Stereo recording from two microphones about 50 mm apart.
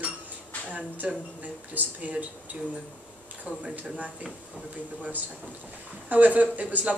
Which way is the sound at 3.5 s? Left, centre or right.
Right.